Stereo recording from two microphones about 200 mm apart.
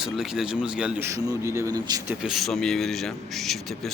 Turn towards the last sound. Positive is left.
turn(degrees=0)  # may be behind; listen again after turning